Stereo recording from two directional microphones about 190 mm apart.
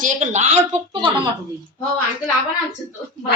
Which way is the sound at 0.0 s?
40° right (ahead or behind).